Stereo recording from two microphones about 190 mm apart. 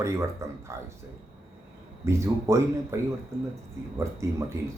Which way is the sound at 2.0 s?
15° right (ahead or behind).